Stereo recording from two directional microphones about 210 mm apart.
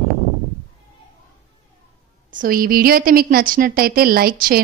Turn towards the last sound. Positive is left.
turn(degrees=-45)  # may be behind; listen again after turning